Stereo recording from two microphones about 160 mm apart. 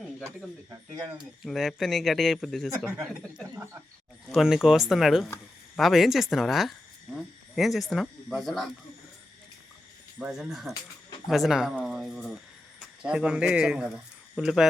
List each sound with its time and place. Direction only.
1.2 s speech: centre (ahead or behind)
3.5 s a sound: 15° right (ahead or behind)
4.3 s speech: 5° right (ahead or behind)
10.2 s speech: 5° right (ahead or behind)